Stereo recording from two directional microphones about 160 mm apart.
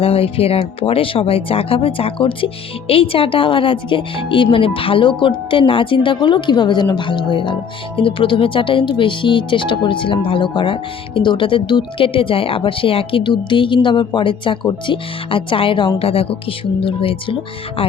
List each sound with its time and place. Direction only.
0.0 s speech: 35° left (ahead or behind)